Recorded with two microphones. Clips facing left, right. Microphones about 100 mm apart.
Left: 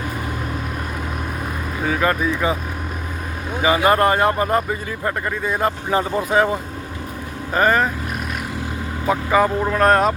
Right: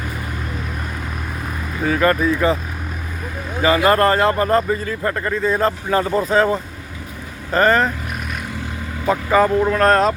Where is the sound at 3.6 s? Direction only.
15° left (ahead or behind).